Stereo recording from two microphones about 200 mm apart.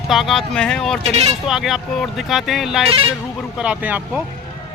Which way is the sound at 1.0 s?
30° right (ahead or behind).